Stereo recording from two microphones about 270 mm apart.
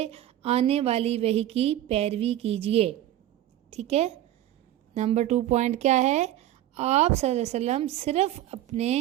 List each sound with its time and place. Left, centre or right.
0.0 s a woman's voice: right